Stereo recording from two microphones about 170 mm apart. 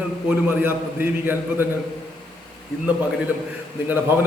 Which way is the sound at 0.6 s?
10° right (ahead or behind).